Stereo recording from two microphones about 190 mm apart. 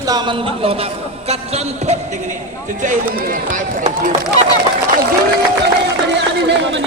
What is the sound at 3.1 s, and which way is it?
Speech, 50° right (ahead or behind).